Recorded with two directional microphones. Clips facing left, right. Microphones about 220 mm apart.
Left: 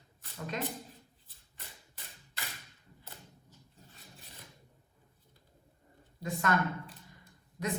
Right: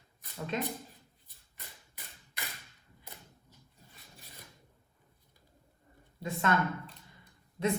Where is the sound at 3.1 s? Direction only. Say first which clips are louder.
Even; 15° right (ahead or behind).